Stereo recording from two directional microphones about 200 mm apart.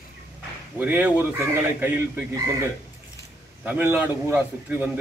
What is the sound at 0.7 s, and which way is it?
A man's voice, 10° right (ahead or behind).